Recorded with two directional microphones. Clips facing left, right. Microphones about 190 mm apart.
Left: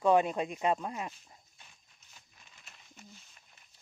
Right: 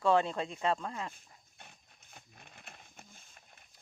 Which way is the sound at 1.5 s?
60° right (ahead or behind).